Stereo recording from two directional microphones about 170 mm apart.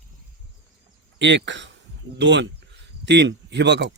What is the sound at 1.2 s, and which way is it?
A man's voice, 90° right.